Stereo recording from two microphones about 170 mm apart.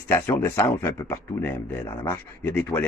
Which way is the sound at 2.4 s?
10° left (ahead or behind).